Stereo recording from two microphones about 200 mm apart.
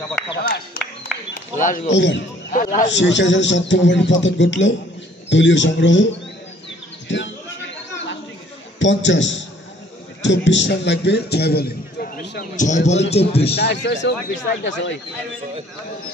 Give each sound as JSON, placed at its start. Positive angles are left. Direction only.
{"t": 0.8, "sound": "a sound", "side_deg": 45}
{"t": 1.3, "sound": "speech", "side_deg": 40}
{"t": 1.9, "sound": "a man's voice", "side_deg": 65}
{"t": 2.5, "sound": "a man's voice", "side_deg": 40}
{"t": 2.9, "sound": "a man's voice", "side_deg": 65}
{"t": 7.1, "sound": "speech", "side_deg": 65}
{"t": 8.7, "sound": "a man's voice", "side_deg": 65}
{"t": 13.6, "sound": "a man's voice", "side_deg": 55}